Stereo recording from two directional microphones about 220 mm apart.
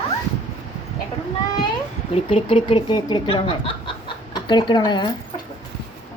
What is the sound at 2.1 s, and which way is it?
Speech, 25° left (ahead or behind).